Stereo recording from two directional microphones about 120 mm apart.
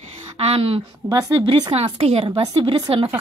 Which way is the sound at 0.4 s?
55° right (ahead or behind).